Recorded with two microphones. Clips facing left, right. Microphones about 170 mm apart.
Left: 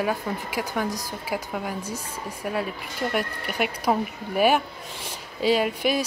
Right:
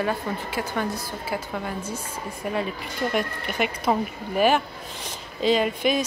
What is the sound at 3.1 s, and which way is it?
Speech, 5° left (ahead or behind).